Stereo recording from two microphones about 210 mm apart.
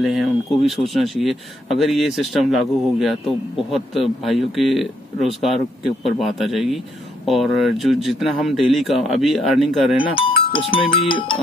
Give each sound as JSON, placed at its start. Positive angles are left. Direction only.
{"t": 0.0, "sound": "speech", "side_deg": 0}
{"t": 9.9, "sound": "speech", "side_deg": 25}